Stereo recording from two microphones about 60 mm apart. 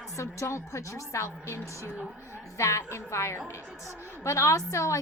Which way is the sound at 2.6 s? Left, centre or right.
Left.